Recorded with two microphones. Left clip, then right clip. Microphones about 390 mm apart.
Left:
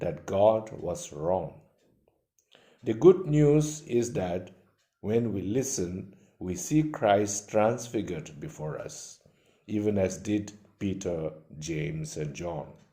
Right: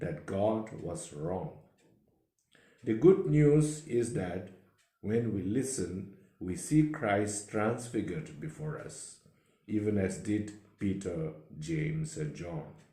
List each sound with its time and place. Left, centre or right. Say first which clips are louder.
0.0 s speech: left 8 dB; left
2.5 s speech: left 2 dB; left